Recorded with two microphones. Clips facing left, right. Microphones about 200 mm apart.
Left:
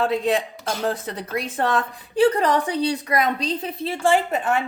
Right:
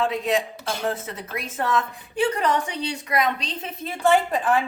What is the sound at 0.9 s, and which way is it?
A woman's voice, 35° left (ahead or behind).